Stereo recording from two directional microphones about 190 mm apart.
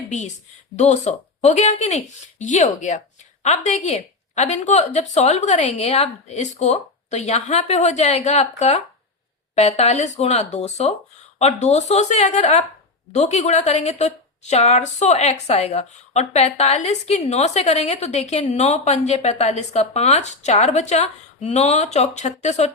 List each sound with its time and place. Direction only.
0.1 s a woman's voice: 40° left (ahead or behind)